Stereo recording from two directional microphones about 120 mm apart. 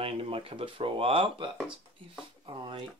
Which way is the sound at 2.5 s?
40° right (ahead or behind).